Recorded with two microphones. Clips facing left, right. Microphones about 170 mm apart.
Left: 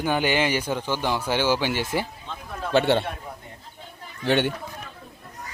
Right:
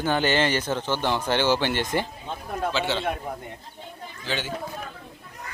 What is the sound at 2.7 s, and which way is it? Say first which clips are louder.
Speech: left 10 dB; 55° left (ahead or behind).